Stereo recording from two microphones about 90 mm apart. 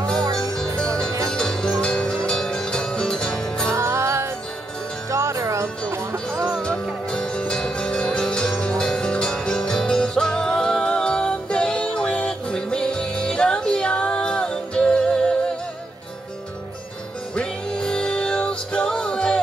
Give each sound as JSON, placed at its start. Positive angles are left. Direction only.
{"t": 0.7, "sound": "music", "side_deg": 10}
{"t": 3.7, "sound": "music", "side_deg": -30}
{"t": 6.4, "sound": "music", "side_deg": 10}
{"t": 17.4, "sound": "music", "side_deg": 10}